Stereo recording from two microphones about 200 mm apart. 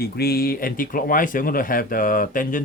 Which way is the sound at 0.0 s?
50° left (ahead or behind).